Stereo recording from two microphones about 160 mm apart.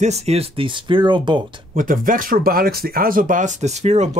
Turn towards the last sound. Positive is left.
turn(degrees=-45)  # may be behind; listen again after turning